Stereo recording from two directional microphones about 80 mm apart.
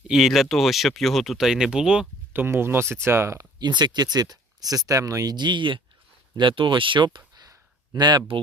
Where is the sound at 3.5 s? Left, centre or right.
Right.